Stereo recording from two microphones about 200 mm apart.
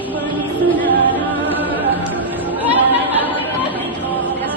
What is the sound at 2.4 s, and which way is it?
Chatter, 10° right (ahead or behind).